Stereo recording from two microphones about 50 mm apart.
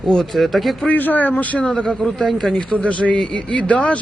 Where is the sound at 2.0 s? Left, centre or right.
Centre.